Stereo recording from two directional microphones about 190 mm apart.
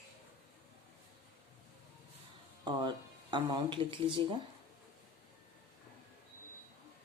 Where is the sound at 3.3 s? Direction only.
25° right (ahead or behind).